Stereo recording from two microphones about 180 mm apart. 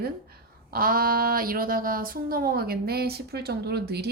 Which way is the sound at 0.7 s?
55° right (ahead or behind).